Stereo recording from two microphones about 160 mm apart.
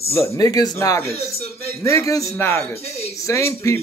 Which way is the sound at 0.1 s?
20° left (ahead or behind).